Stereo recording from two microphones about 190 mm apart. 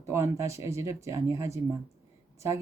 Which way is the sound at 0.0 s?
15° right (ahead or behind).